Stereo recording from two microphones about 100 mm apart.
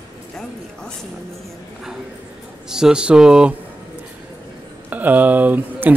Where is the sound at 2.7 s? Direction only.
5° right (ahead or behind).